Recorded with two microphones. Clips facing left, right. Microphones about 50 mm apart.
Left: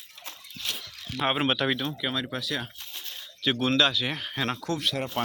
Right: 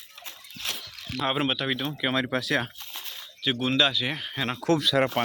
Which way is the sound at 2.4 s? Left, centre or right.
Right.